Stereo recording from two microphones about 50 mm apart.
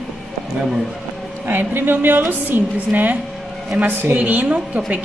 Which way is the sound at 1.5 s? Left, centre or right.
Right.